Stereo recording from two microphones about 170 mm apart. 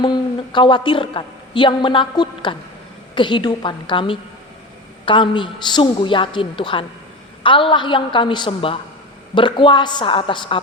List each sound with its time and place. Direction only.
0.0 s a woman's voice: 25° left (ahead or behind)